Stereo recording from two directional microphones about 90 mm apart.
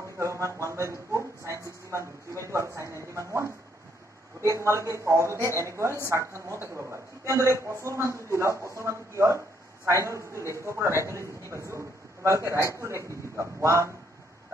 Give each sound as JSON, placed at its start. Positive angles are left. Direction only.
{"t": 0.2, "sound": "a woman's voice", "side_deg": -35}